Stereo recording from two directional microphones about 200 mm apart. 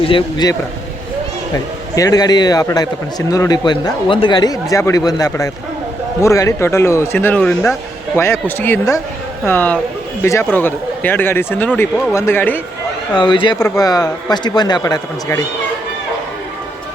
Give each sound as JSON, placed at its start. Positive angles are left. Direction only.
{"t": 0.1, "sound": "a man's voice", "side_deg": 25}
{"t": 1.5, "sound": "a man's voice", "side_deg": 20}
{"t": 13.1, "sound": "a man's voice", "side_deg": 25}